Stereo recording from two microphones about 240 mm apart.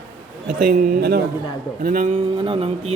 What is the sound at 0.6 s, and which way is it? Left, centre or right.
Speech, right.